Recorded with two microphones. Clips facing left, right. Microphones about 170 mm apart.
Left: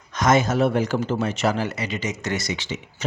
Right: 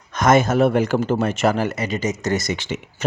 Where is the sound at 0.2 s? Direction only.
55° right (ahead or behind).